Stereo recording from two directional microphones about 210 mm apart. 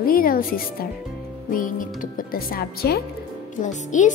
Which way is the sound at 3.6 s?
35° left (ahead or behind).